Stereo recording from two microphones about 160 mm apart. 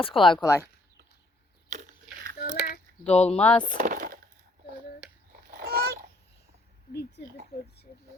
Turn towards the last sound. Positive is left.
turn(degrees=80)